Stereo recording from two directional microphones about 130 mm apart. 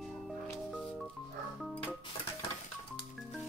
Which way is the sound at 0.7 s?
5° left (ahead or behind).